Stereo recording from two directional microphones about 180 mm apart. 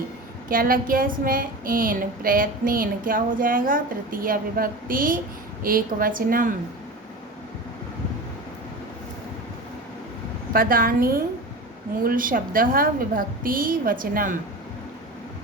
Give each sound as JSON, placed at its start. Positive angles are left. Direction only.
{"t": 0.4, "sound": "a woman's voice", "side_deg": -50}
{"t": 10.5, "sound": "a woman's voice", "side_deg": -50}